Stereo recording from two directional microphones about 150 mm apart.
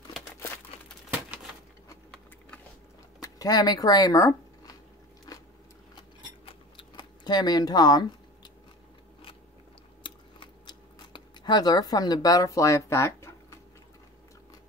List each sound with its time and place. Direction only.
1.1 s bird: 5° right (ahead or behind)
3.2 s speech: 25° left (ahead or behind)
5.9 s scissors: 30° left (ahead or behind)
10.0 s chewing: 30° left (ahead or behind)